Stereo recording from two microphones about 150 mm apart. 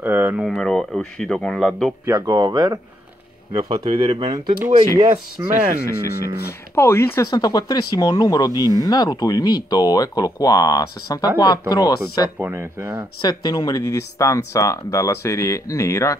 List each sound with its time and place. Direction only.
0.0 s a sound: 15° right (ahead or behind)
0.5 s speech: 5° left (ahead or behind)
2.0 s speech: 25° right (ahead or behind)
3.5 s speech: 40° right (ahead or behind)
4.9 s speech: 25° right (ahead or behind)
5.9 s speech: 90° left
6.7 s speech: 15° left (ahead or behind)
12.4 s speech: 15° right (ahead or behind)
13.2 s speech: 30° left (ahead or behind)